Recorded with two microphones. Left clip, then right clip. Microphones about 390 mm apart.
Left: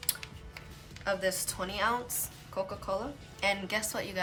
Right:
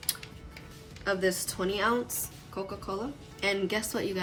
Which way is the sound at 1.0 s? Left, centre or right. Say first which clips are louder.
Right 2 dB; centre.